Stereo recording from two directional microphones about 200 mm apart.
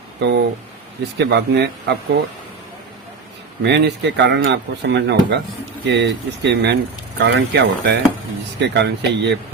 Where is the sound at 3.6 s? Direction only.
60° right (ahead or behind).